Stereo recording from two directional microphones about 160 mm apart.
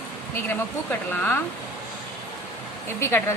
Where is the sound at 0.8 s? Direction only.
10° left (ahead or behind).